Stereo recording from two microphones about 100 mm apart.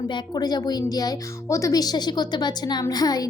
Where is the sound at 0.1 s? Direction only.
40° left (ahead or behind).